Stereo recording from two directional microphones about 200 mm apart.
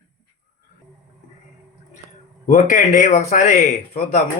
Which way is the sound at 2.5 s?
40° left (ahead or behind).